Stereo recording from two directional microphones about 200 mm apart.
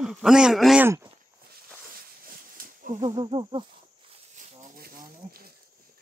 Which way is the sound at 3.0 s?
25° right (ahead or behind).